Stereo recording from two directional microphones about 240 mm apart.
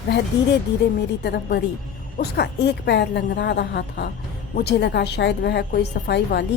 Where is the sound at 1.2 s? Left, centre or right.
Left.